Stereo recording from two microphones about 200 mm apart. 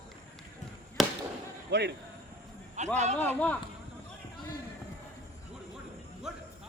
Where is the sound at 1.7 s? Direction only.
55° right (ahead or behind).